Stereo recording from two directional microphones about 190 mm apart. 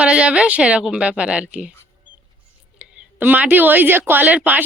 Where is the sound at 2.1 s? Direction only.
5° right (ahead or behind).